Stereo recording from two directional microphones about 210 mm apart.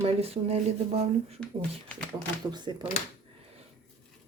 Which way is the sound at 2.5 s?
20° right (ahead or behind).